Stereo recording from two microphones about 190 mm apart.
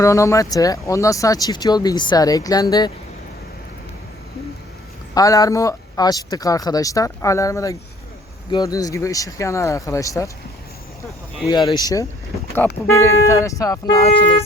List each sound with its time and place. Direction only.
0.0 s speech: 15° left (ahead or behind)
5.1 s speech: 20° left (ahead or behind)
11.7 s speech: 20° left (ahead or behind)
14.0 s speech: 30° left (ahead or behind)